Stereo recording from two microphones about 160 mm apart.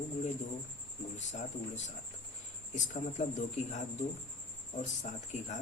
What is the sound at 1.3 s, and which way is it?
Speech, 45° left (ahead or behind).